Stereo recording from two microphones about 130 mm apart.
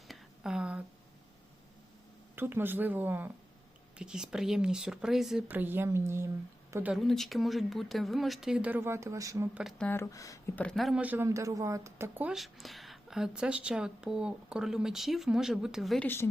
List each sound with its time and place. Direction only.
0.1 s a sound: 5° right (ahead or behind)
2.3 s speech: 15° right (ahead or behind)
5.5 s speech: 15° right (ahead or behind)
6.9 s speech: centre (ahead or behind); by 9.5 s 25° right (ahead or behind)
9.7 s a woman's voice: 10° left (ahead or behind)
10.0 s speech: 25° left (ahead or behind)
10.5 s speech: 10° left (ahead or behind)
11.0 s speech: 15° right (ahead or behind)
12.3 s speech: centre (ahead or behind)
16.0 s a woman's voice: 15° left (ahead or behind)